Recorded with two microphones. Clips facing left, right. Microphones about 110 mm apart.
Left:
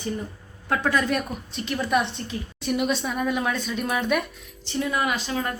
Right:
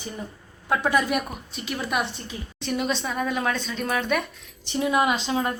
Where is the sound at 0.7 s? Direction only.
15° right (ahead or behind).